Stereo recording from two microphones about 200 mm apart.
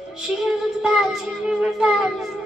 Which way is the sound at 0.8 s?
Centre (ahead or behind).